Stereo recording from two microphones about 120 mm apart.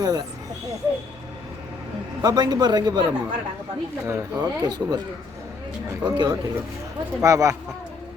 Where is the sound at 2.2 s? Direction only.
35° right (ahead or behind).